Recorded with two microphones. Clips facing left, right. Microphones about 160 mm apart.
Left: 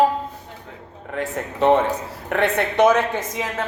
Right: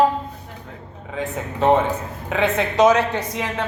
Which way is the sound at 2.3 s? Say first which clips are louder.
Even; 65° left (ahead or behind).